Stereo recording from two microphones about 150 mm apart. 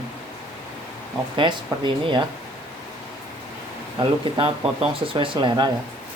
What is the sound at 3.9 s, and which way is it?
Speech, 35° right (ahead or behind).